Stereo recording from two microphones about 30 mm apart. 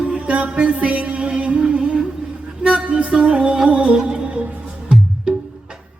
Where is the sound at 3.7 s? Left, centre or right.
Right.